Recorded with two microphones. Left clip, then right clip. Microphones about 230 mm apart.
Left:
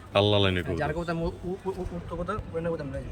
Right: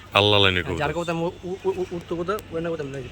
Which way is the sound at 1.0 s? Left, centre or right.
Right.